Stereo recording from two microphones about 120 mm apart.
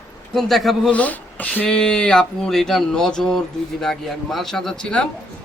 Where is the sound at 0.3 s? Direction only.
Centre (ahead or behind).